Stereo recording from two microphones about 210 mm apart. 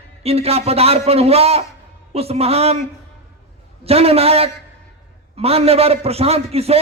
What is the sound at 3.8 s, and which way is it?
A man's voice, 30° right (ahead or behind).